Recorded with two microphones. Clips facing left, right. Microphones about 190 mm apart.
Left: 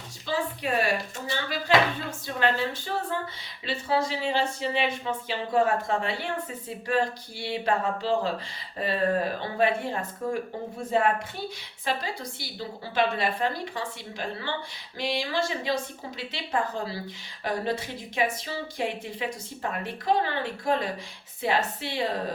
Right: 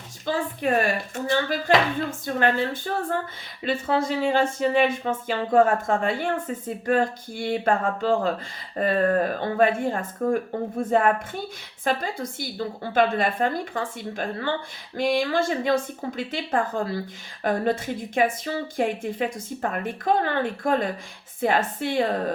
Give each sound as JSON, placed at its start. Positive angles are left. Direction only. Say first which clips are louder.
{"t": 0.3, "sound": "speech", "louder": "right 4 dB", "side_deg": -50}